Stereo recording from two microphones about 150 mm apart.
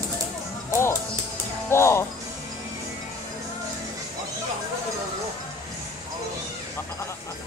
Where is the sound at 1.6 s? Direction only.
15° left (ahead or behind).